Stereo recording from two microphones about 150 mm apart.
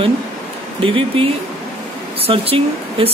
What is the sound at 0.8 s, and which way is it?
Speech, 40° right (ahead or behind).